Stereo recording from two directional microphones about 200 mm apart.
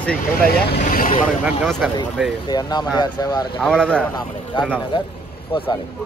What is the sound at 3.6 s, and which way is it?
Speech, 5° left (ahead or behind).